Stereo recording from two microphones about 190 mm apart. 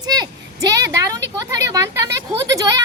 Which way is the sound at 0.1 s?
20° right (ahead or behind).